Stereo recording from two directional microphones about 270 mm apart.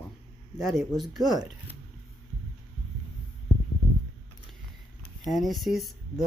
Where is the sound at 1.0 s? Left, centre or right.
Centre.